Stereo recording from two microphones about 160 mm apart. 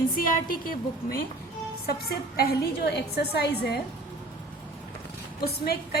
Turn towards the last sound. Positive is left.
turn(degrees=80)